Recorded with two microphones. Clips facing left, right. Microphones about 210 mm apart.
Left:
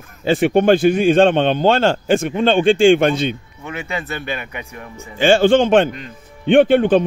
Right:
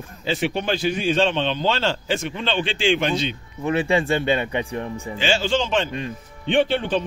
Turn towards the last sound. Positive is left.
turn(degrees=50)  # may be behind; listen again after turning